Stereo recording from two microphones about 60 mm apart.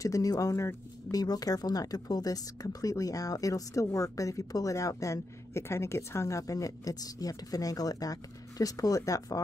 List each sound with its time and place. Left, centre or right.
0.0 s speech: left
1.1 s speech: left